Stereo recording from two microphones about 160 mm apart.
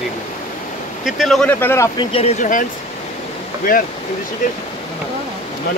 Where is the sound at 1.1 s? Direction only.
Centre (ahead or behind).